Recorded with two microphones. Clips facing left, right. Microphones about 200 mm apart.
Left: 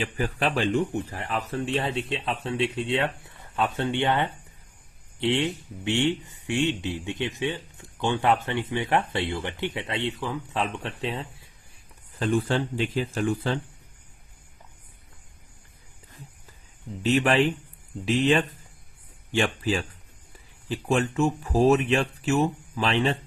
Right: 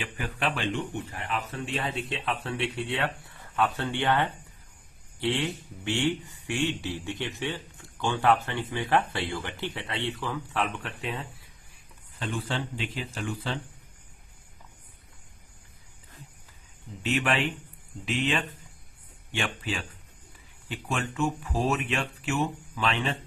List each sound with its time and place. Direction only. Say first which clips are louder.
0.0 s speech: left 5 dB; 35° left (ahead or behind)
12.2 s speech: left 8 dB; 45° left (ahead or behind)
17.0 s speech: left 6 dB; 35° left (ahead or behind)